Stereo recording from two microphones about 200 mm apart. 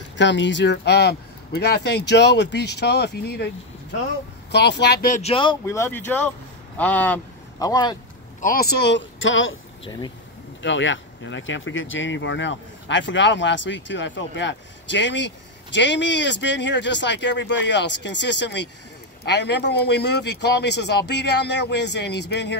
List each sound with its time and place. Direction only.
0.2 s speech: 65° left (ahead or behind)
4.5 s speech: 60° left (ahead or behind); by 5.3 s 40° left (ahead or behind)
5.3 s speech: 25° left (ahead or behind)
5.7 s speech: 10° left (ahead or behind)
7.5 s speech: 20° left (ahead or behind)
8.4 s speech: 45° left (ahead or behind); by 9.6 s 75° left (ahead or behind)
9.8 s speech: 20° left (ahead or behind)
10.6 s speech: 65° left (ahead or behind)